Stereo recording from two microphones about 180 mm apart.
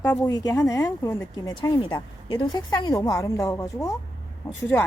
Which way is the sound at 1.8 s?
30° left (ahead or behind).